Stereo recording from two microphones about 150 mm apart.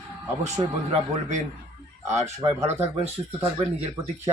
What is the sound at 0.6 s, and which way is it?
Speech, 25° right (ahead or behind).